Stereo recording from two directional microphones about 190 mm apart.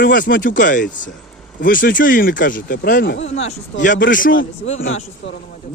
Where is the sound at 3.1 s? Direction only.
75° left (ahead or behind).